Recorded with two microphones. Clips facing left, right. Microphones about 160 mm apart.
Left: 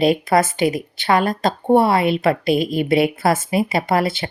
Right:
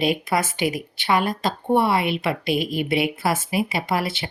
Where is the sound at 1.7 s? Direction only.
40° left (ahead or behind).